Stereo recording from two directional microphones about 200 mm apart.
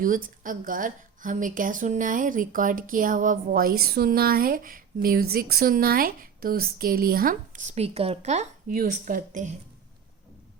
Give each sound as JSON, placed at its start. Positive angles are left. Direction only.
{"t": 0.0, "sound": "a woman's voice", "side_deg": -45}